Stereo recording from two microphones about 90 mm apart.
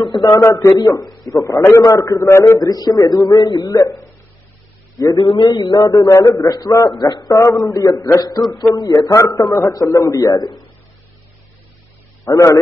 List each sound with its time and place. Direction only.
0.1 s a man's voice: 45° left (ahead or behind)
3.5 s a man's voice: 35° left (ahead or behind)
5.1 s a man's voice: 70° left (ahead or behind)
6.0 s a man's voice: 40° left (ahead or behind)
7.0 s a man's voice: 55° left (ahead or behind)
7.3 s a man's voice: 35° left (ahead or behind)
9.1 s a man's voice: 35° left (ahead or behind)
10.3 s a man's voice: 50° left (ahead or behind)
12.3 s a man's voice: 35° left (ahead or behind)